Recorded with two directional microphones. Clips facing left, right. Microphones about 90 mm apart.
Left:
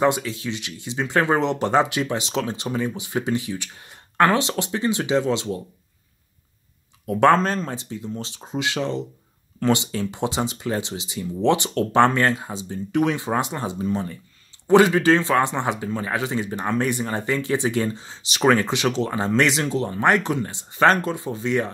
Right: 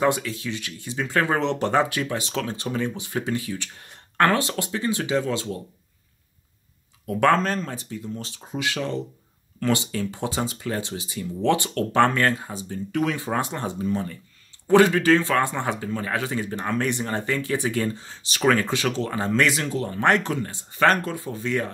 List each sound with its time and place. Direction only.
0.0 s speech: 20° left (ahead or behind)
7.2 s speech: 30° left (ahead or behind)